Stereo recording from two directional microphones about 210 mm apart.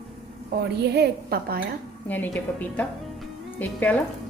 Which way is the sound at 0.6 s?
50° right (ahead or behind).